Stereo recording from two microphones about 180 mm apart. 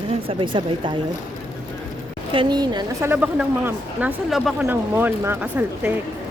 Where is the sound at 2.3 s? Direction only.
25° right (ahead or behind).